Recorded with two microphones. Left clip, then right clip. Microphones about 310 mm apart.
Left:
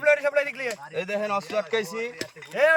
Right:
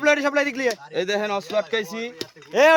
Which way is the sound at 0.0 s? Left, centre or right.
Right.